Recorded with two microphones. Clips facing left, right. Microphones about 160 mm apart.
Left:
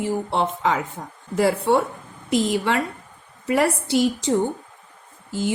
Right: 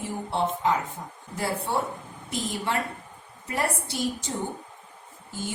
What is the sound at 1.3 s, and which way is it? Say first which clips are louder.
A woman's voice: left 9 dB; 80° left.